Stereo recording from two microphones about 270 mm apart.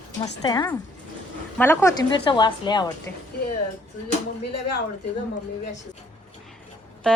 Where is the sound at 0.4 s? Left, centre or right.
Centre.